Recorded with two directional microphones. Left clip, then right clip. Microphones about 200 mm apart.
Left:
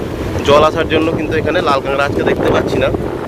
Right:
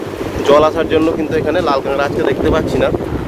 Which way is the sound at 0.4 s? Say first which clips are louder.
Even; 15° right (ahead or behind).